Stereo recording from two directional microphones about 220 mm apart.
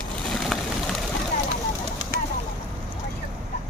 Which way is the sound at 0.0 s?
Centre (ahead or behind).